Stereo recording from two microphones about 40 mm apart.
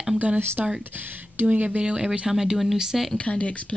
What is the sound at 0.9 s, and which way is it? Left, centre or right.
Speech, right.